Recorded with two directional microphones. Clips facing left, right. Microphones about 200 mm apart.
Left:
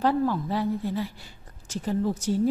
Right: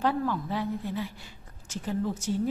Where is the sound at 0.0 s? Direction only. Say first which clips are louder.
Left 4 dB; 35° left (ahead or behind).